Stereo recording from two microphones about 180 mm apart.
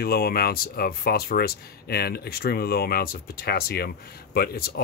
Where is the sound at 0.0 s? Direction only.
55° left (ahead or behind).